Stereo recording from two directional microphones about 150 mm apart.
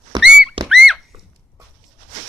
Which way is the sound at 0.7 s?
Centre (ahead or behind).